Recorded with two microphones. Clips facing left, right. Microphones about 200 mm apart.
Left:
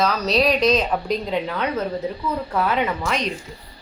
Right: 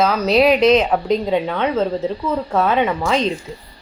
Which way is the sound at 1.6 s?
25° right (ahead or behind).